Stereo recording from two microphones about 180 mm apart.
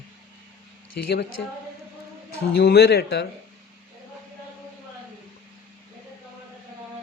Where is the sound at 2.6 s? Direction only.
60° left (ahead or behind).